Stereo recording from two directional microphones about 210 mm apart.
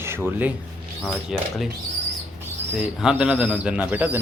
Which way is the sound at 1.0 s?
Centre (ahead or behind).